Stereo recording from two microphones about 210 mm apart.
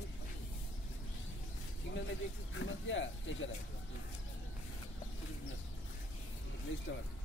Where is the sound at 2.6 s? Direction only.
65° left (ahead or behind).